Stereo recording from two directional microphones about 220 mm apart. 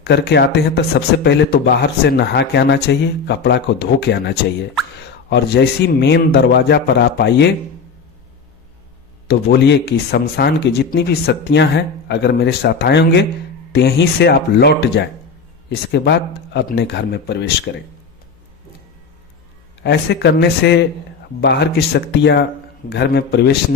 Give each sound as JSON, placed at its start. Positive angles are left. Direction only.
{"t": 0.0, "sound": "speech", "side_deg": 50}
{"t": 5.3, "sound": "speech", "side_deg": 50}
{"t": 9.2, "sound": "speech", "side_deg": 45}
{"t": 19.8, "sound": "speech", "side_deg": 50}